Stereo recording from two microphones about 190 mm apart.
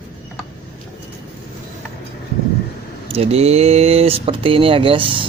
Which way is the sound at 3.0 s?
30° right (ahead or behind).